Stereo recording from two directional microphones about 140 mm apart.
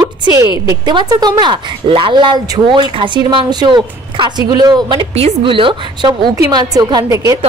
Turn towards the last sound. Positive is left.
turn(degrees=-25)  # may be behind; listen again after turning